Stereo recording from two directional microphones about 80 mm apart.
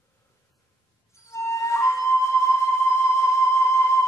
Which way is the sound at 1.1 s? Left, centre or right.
Left.